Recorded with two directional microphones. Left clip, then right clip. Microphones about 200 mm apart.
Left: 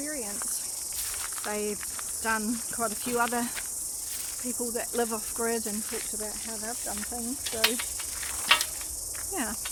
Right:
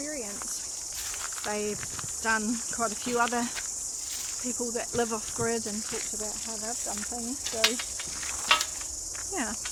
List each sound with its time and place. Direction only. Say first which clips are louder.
1.5 s cricket: even; centre (ahead or behind)
4.7 s cricket: even; 5° right (ahead or behind)
8.5 s insect: left 1 dB; 10° left (ahead or behind)